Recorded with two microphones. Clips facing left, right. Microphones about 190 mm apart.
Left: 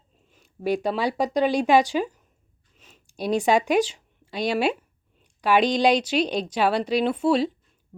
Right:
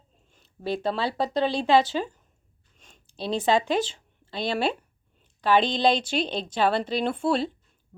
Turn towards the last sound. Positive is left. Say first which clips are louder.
# left 4 dB
turn(degrees=5)  # may be behind; listen again after turning